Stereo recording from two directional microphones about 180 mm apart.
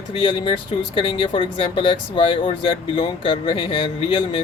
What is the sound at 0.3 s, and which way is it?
Speech, 30° left (ahead or behind).